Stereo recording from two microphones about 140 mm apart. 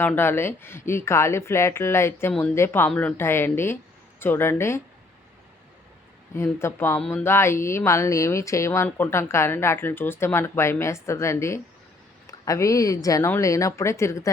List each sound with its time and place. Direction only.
0.0 s speech: 15° left (ahead or behind)
6.3 s speech: 20° left (ahead or behind)